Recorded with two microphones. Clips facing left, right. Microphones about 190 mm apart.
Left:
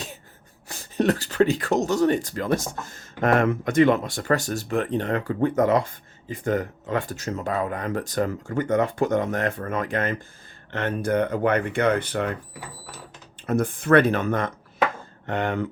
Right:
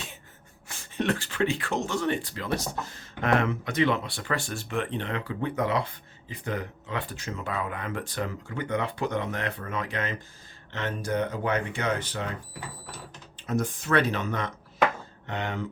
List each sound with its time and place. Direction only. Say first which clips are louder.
0.7 s speech: left 6 dB; 40° left (ahead or behind); by 12.4 s 60° left (ahead or behind)
13.5 s speech: left 7 dB; 55° left (ahead or behind)